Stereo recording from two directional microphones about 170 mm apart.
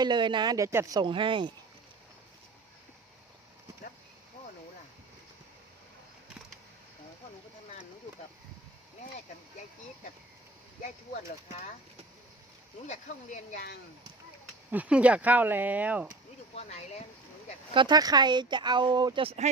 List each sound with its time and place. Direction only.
0.0 s speech: 25° right (ahead or behind)
12.9 s speech: 45° left (ahead or behind)
14.7 s speech: 10° right (ahead or behind)
16.6 s speech: 40° left (ahead or behind)
17.7 s speech: 25° right (ahead or behind)